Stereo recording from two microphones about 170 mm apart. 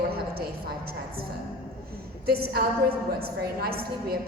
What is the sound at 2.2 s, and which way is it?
A woman's voice, 65° right (ahead or behind).